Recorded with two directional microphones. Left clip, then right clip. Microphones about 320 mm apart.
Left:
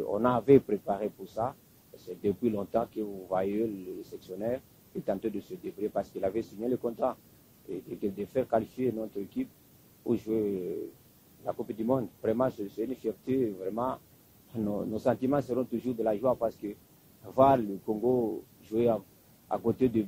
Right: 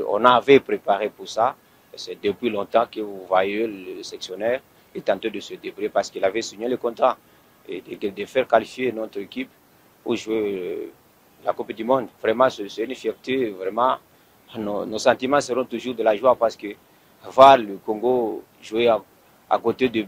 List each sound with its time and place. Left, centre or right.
0.0 s speech: centre
8.2 s speech: centre
15.0 s speech: centre
17.8 s speech: right